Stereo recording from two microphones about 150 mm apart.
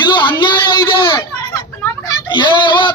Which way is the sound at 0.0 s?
30° left (ahead or behind).